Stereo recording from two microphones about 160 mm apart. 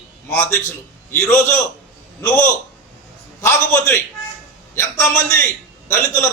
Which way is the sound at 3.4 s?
15° left (ahead or behind).